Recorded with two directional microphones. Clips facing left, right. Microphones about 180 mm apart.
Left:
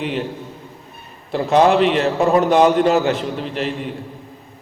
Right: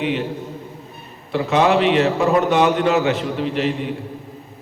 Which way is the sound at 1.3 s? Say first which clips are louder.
Left 2 dB; 35° left (ahead or behind).